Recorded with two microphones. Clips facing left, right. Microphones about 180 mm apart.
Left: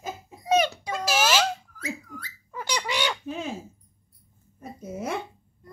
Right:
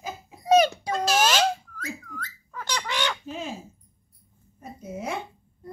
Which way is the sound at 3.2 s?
60° left (ahead or behind).